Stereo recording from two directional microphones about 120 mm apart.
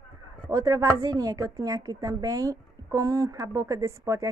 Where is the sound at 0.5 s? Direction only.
30° right (ahead or behind).